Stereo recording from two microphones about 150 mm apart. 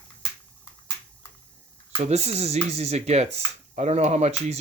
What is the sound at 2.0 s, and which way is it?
Speech, 45° right (ahead or behind).